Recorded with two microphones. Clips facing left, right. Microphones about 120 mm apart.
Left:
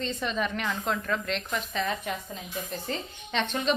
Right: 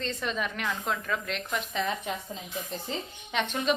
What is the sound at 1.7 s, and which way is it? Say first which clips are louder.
A woman's voice: left 1 dB; 20° right (ahead or behind).